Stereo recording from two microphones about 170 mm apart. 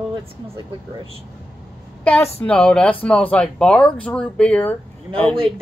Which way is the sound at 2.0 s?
15° left (ahead or behind).